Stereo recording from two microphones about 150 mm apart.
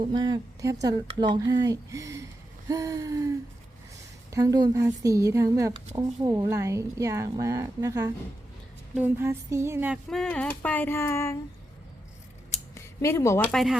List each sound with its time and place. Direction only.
0.1 s speech: 30° right (ahead or behind)
2.6 s a sound: 20° right (ahead or behind)
4.3 s speech: 25° right (ahead or behind)
9.0 s a sound: 15° right (ahead or behind)
10.1 s speech: 5° left (ahead or behind)
12.7 s speech: 20° left (ahead or behind)
13.5 s speech: centre (ahead or behind)